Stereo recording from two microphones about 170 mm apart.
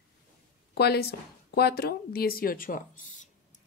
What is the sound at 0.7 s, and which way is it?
Speech, 70° left (ahead or behind).